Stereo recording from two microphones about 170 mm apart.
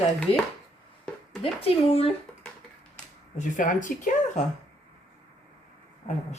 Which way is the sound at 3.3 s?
50° left (ahead or behind).